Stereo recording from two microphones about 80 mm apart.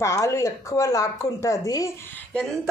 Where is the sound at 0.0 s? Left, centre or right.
Left.